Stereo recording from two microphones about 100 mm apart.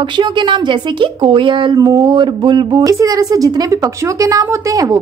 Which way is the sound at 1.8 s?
35° right (ahead or behind).